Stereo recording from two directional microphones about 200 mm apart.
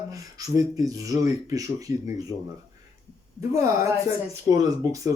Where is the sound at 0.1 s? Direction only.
15° right (ahead or behind).